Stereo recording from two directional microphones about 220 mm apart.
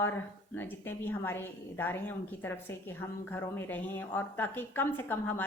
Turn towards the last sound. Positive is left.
turn(degrees=10)  # may be behind; listen again after turning